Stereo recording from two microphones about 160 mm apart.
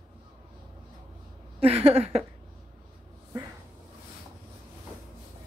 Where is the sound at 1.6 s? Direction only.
40° right (ahead or behind).